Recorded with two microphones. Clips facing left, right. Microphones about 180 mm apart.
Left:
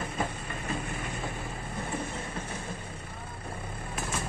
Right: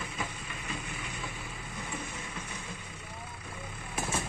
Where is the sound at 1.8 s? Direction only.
55° left (ahead or behind).